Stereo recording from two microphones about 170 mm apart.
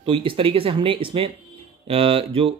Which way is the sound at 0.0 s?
30° right (ahead or behind).